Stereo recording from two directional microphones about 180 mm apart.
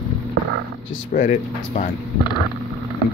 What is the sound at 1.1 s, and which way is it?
Speech, 45° left (ahead or behind).